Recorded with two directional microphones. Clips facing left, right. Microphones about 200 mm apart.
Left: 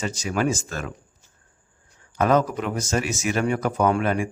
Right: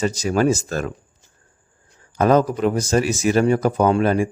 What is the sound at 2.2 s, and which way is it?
Speech, 35° right (ahead or behind).